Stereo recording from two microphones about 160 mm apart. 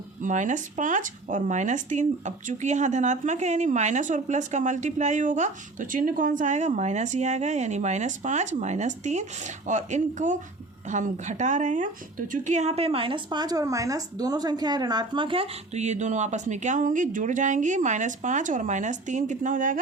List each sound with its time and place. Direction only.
0.2 s speech: 50° right (ahead or behind)